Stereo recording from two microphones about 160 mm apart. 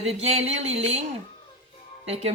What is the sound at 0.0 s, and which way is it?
Speech, 40° right (ahead or behind).